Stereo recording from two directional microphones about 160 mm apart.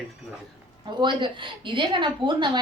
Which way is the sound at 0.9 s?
30° right (ahead or behind).